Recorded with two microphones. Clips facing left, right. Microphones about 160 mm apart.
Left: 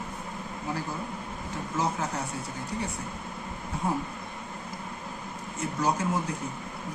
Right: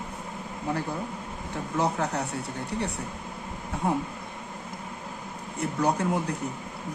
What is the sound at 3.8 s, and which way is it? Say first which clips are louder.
Speech: right 3 dB; 65° right (ahead or behind).